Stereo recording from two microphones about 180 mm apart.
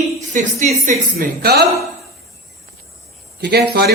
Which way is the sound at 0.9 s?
55° right (ahead or behind).